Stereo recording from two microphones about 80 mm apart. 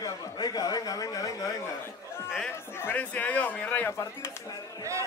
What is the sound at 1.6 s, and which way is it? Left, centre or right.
A man's voice, left.